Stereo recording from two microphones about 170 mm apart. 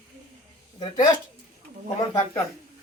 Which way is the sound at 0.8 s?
25° left (ahead or behind).